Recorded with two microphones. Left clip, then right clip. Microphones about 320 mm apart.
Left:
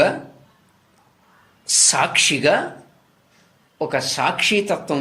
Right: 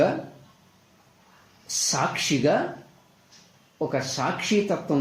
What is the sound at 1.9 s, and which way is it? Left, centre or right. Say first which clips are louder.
Speech: left 6 dB; left.